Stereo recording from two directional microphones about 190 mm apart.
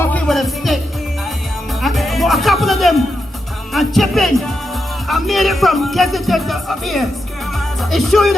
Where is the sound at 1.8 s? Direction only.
Centre (ahead or behind).